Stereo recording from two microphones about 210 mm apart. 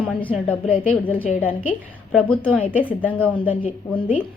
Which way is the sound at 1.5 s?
25° left (ahead or behind).